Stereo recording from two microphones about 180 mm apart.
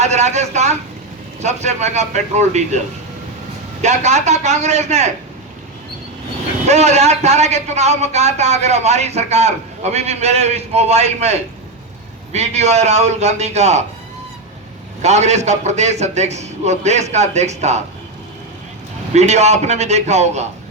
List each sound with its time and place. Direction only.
0.0 s a man's voice: 40° right (ahead or behind)
6.7 s a man's voice: 40° right (ahead or behind)
15.0 s a man's voice: 40° right (ahead or behind)
19.1 s a man's voice: 40° right (ahead or behind)